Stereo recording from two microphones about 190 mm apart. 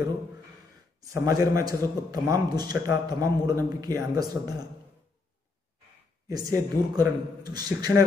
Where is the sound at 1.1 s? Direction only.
20° right (ahead or behind).